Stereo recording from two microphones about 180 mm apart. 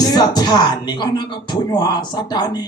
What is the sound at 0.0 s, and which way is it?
Speech, 20° left (ahead or behind).